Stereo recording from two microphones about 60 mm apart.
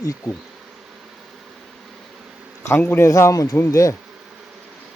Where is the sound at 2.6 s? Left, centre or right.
Left.